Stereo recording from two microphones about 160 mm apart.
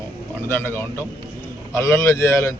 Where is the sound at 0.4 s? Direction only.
15° left (ahead or behind).